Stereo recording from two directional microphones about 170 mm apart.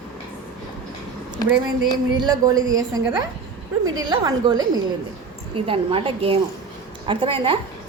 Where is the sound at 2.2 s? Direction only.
20° right (ahead or behind).